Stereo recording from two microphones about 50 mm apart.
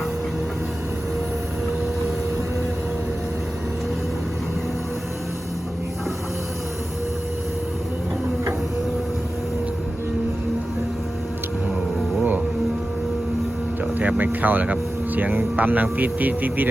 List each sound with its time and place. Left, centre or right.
14.0 s speech: right